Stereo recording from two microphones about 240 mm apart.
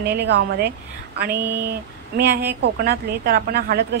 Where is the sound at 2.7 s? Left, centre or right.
Right.